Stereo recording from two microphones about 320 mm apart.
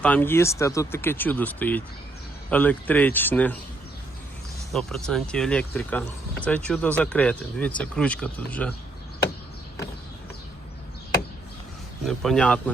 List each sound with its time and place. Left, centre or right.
0.0 s speech: centre
4.7 s speech: centre
12.0 s speech: centre